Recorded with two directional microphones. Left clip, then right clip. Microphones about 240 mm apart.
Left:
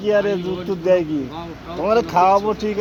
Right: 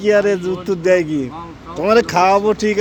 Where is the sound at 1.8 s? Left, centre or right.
Right.